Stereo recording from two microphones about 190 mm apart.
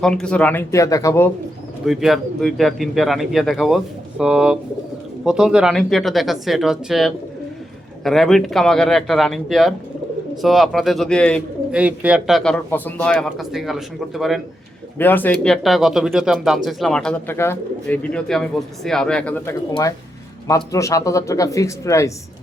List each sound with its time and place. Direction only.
0.0 s speech: 5° left (ahead or behind)
1.8 s speech: centre (ahead or behind)
11.7 s speech: 5° right (ahead or behind)
14.9 s speech: 10° left (ahead or behind)
20.7 s speech: 15° left (ahead or behind)